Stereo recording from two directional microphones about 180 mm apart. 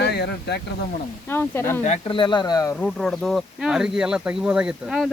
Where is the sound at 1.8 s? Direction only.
35° left (ahead or behind).